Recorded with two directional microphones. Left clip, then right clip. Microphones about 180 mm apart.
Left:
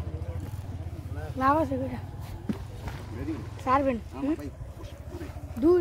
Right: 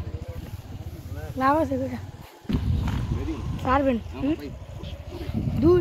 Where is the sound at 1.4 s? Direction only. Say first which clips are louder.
Right 3 dB; 40° right (ahead or behind).